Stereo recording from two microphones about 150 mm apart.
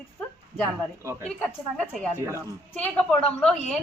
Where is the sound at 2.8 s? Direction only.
5° left (ahead or behind).